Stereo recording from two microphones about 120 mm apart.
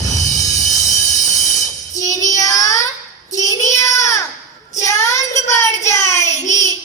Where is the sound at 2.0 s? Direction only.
30° left (ahead or behind).